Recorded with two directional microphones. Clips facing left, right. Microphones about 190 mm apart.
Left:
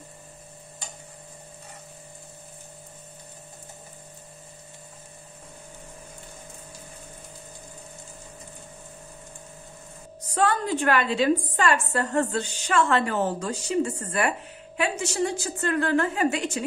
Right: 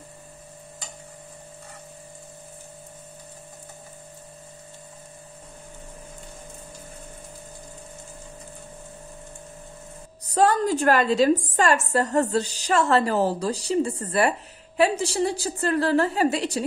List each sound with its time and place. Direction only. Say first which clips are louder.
10.2 s a woman's voice: right 4 dB; 40° right (ahead or behind)